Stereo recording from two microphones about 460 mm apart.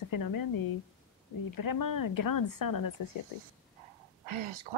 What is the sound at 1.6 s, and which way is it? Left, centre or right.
Speech, left.